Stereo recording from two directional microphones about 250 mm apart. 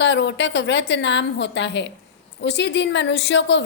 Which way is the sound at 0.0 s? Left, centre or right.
Left.